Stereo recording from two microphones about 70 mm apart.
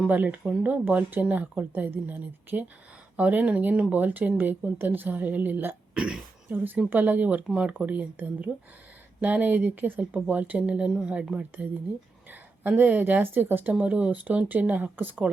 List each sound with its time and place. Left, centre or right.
0.1 s speech: right
5.9 s speech: centre
6.5 s speech: right
13.7 s speech: centre